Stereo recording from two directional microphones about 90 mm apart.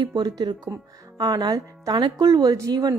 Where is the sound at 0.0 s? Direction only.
50° right (ahead or behind).